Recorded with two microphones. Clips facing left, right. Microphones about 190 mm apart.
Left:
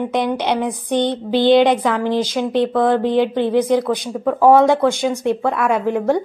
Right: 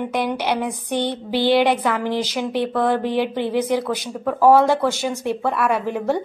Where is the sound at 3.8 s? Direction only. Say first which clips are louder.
Left 4 dB; 15° left (ahead or behind).